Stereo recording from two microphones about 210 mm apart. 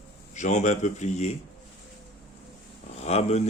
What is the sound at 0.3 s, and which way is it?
Speech, 35° left (ahead or behind).